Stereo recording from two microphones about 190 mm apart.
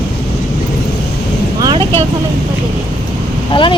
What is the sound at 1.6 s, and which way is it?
Vehicle, 25° right (ahead or behind).